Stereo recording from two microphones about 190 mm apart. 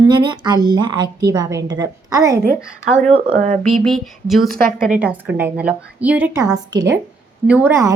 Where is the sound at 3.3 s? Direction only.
40° right (ahead or behind).